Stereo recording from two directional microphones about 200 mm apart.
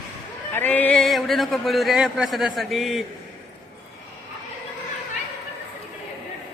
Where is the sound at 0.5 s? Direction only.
10° left (ahead or behind).